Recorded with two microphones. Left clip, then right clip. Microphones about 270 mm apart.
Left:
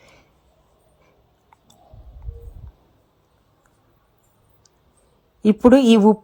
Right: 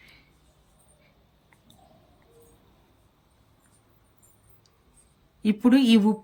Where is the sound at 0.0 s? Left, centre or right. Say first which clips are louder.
Left 3 dB; centre.